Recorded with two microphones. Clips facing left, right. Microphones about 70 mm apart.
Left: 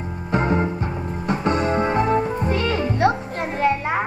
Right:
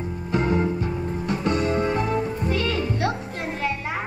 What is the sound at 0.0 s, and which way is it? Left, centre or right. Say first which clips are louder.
Music: left 2 dB; left.